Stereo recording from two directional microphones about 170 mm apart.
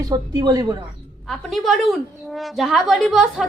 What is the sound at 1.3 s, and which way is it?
A woman's voice, centre (ahead or behind).